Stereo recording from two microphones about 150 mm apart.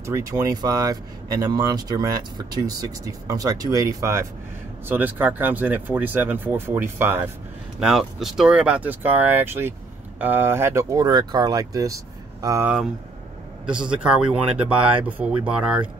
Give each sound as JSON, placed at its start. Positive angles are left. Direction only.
{"t": 0.0, "sound": "speech", "side_deg": -20}
{"t": 7.8, "sound": "speech", "side_deg": 0}
{"t": 12.6, "sound": "a man's voice", "side_deg": -5}